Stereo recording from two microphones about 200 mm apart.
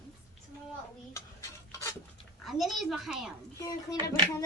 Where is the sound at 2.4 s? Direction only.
Centre (ahead or behind).